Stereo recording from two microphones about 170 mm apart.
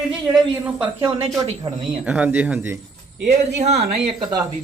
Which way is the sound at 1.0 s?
35° right (ahead or behind).